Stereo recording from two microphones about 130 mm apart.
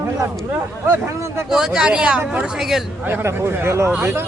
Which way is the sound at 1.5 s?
5° right (ahead or behind).